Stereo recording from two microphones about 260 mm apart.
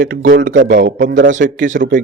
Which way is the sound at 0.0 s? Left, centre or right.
Right.